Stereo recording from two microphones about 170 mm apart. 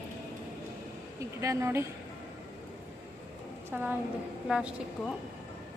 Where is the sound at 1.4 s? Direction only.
15° right (ahead or behind).